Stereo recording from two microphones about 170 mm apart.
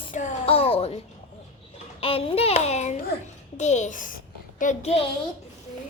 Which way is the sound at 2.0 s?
35° left (ahead or behind).